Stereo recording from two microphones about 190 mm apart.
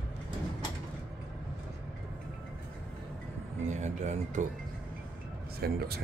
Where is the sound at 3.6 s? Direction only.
40° right (ahead or behind).